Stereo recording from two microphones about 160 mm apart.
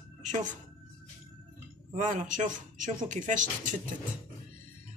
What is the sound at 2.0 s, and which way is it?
Speech, 50° right (ahead or behind).